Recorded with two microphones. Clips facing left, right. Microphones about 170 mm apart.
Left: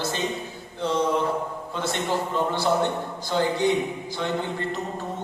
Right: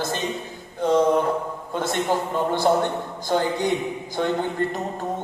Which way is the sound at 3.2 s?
50° right (ahead or behind).